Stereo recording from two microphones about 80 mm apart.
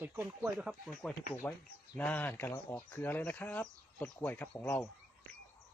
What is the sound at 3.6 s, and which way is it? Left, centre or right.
Speech, centre.